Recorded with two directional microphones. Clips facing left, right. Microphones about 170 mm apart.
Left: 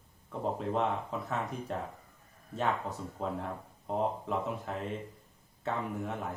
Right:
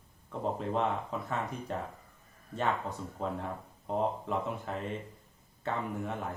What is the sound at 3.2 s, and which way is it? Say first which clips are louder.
Speech: even; centre (ahead or behind).